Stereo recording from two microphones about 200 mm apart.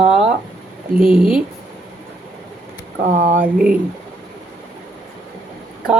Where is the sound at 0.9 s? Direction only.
45° right (ahead or behind).